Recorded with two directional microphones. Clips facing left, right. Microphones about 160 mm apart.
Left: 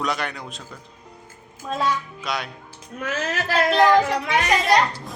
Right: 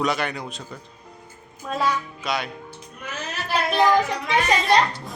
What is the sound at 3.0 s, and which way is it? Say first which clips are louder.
Speech: left 7 dB; 90° left.